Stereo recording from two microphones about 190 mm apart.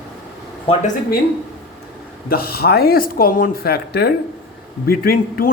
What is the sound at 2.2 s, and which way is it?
A man's voice, 55° left (ahead or behind).